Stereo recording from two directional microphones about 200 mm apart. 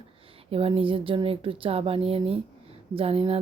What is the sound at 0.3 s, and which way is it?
Speech, 30° right (ahead or behind).